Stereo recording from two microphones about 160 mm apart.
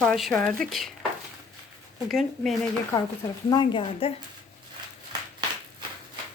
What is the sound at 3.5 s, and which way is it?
Speech, 30° left (ahead or behind).